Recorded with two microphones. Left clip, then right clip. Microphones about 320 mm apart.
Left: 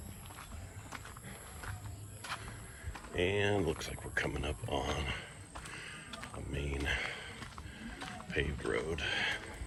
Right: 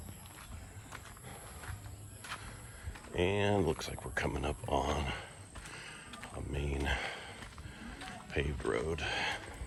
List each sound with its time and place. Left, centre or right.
3.2 s speech: centre
5.7 s horse: centre
6.5 s a sound: centre
8.3 s speech: centre